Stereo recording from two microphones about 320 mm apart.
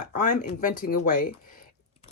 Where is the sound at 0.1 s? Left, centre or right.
Left.